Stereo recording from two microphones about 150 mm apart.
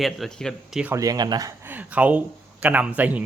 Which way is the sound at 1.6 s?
10° right (ahead or behind).